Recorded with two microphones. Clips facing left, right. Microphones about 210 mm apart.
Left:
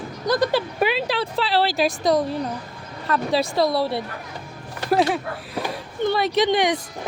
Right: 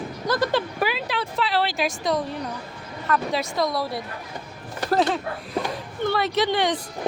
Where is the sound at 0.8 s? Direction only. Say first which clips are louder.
Left 4 dB; 30° left (ahead or behind).